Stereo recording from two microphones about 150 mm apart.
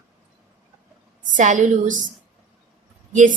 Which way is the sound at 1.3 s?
55° right (ahead or behind).